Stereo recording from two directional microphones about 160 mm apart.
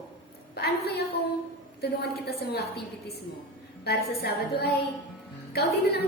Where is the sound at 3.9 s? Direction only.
85° left.